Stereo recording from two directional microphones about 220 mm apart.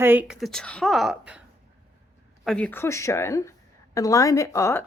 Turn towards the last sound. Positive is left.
turn(degrees=10)  # may be behind; listen again after turning